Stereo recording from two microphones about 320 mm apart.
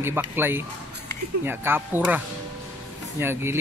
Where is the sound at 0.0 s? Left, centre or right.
Centre.